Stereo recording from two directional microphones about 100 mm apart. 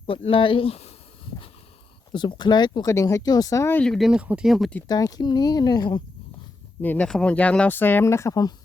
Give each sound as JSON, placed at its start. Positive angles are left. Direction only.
{"t": 0.1, "sound": "speech", "side_deg": 60}
{"t": 2.1, "sound": "speech", "side_deg": 50}
{"t": 2.8, "sound": "speech", "side_deg": 35}
{"t": 3.9, "sound": "speech", "side_deg": 0}
{"t": 4.9, "sound": "speech", "side_deg": 40}
{"t": 6.8, "sound": "speech", "side_deg": 15}